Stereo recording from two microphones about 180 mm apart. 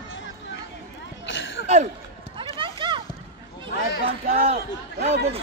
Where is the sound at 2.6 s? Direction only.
30° right (ahead or behind).